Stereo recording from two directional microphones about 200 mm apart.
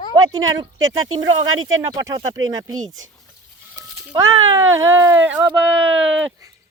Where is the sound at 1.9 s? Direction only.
15° right (ahead or behind).